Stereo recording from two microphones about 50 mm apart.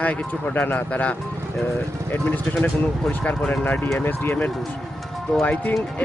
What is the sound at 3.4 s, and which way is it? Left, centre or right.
Speech, left.